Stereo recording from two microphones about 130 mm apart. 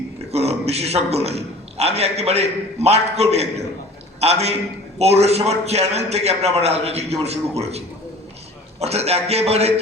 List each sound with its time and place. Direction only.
0.3 s a man's voice: 55° right (ahead or behind)
8.8 s a man's voice: 55° right (ahead or behind)